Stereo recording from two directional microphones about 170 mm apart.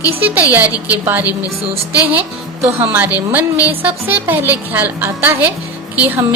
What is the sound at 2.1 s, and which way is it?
Speech, 15° right (ahead or behind).